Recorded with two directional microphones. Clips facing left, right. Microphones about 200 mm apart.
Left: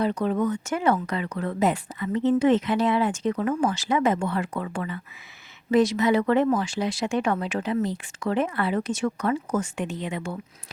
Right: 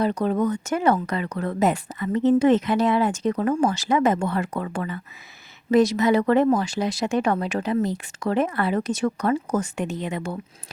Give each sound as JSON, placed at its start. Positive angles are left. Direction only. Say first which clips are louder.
{"t": 0.0, "sound": "speech", "louder": "right 2 dB", "side_deg": -40}